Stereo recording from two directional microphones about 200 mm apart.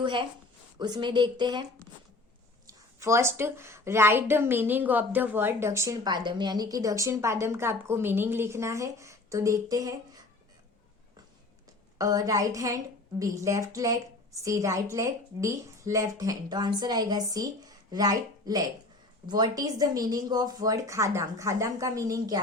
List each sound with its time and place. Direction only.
0.0 s speech: 25° right (ahead or behind)
3.0 s a woman's voice: 15° right (ahead or behind)
11.9 s a woman's voice: 20° right (ahead or behind)